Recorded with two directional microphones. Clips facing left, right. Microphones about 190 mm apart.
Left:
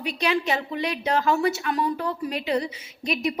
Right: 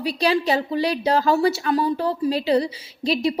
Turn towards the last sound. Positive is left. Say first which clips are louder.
# right 5 dB
turn(degrees=-30)  # may be behind; listen again after turning